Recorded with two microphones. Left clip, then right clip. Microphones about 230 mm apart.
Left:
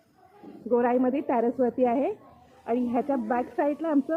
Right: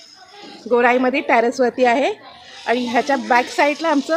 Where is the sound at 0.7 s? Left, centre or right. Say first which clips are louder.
Right 9 dB; centre.